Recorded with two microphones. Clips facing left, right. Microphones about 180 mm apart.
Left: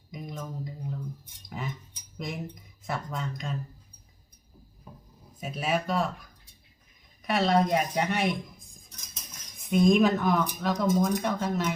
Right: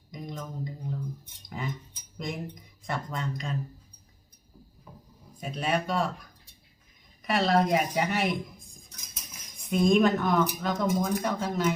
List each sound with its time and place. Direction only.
0.1 s a sound: 5° left (ahead or behind)
1.5 s speech: centre (ahead or behind)
5.4 s speech: 5° left (ahead or behind)